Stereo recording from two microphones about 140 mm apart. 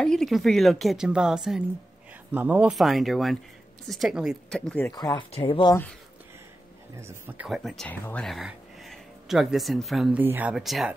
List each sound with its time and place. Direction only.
0.0 s a woman's voice: centre (ahead or behind)
2.7 s a woman's voice: centre (ahead or behind)
4.5 s speech: 5° left (ahead or behind)
4.9 s speech: 30° left (ahead or behind)
7.0 s speech: 15° right (ahead or behind)
7.4 s a woman's voice: centre (ahead or behind)
10.1 s speech: 10° right (ahead or behind)
10.5 s a woman's voice: centre (ahead or behind)